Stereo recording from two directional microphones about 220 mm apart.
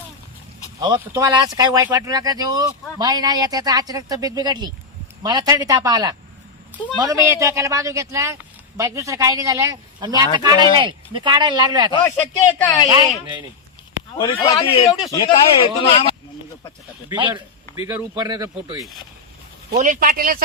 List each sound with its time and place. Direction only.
0.8 s speech: 15° right (ahead or behind)
12.6 s speech: 15° left (ahead or behind)
14.3 s speech: 25° left (ahead or behind)
17.1 s speech: 20° right (ahead or behind)
19.7 s a man's voice: 40° right (ahead or behind)